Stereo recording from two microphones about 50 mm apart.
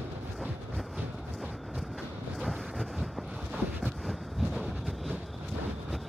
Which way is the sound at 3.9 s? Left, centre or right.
Centre.